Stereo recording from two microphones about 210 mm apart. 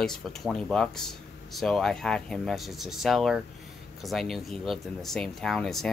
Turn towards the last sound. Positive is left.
turn(degrees=0)  # may be behind; listen again after turning